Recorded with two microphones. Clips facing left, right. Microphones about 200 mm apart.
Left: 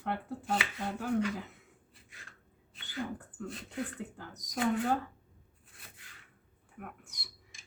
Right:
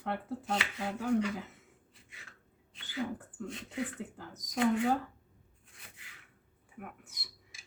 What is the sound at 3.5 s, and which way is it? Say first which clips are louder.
Speech: right 2 dB; centre (ahead or behind).